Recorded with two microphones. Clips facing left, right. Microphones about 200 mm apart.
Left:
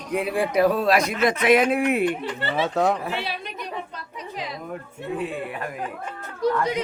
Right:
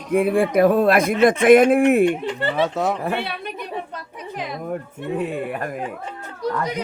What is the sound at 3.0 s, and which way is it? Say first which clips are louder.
Speech: right 4 dB; 55° right (ahead or behind).